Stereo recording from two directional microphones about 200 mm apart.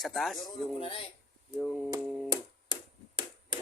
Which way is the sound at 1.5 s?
Centre (ahead or behind).